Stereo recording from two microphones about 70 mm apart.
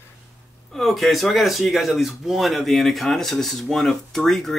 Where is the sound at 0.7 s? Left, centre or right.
Centre.